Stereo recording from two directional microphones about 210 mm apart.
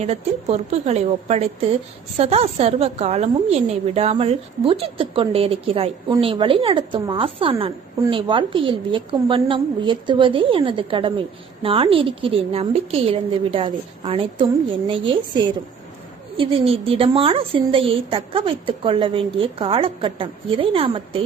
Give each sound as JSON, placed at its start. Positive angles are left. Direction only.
{"t": 0.0, "sound": "a woman's voice", "side_deg": -30}